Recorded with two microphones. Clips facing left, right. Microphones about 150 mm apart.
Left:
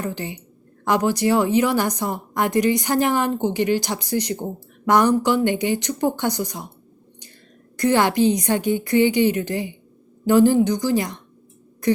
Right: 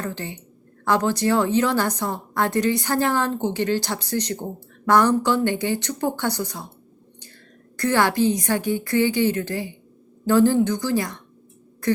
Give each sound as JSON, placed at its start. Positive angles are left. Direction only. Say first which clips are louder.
{"t": 0.0, "sound": "a woman's voice", "louder": "left 2 dB", "side_deg": 15}
{"t": 7.8, "sound": "a woman's voice", "louder": "left 2 dB", "side_deg": 15}
{"t": 11.8, "sound": "a sound", "louder": "left 2 dB", "side_deg": 15}